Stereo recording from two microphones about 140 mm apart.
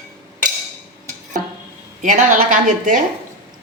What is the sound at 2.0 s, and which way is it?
A woman's voice, 65° right (ahead or behind).